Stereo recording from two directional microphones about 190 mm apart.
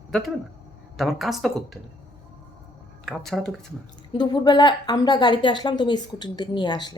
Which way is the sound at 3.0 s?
Centre (ahead or behind).